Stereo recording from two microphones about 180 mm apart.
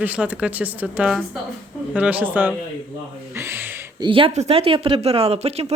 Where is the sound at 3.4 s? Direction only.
15° right (ahead or behind).